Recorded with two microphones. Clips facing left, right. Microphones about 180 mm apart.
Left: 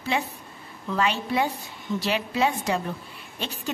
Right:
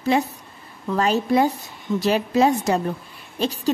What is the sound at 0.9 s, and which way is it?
A woman's voice, 40° right (ahead or behind).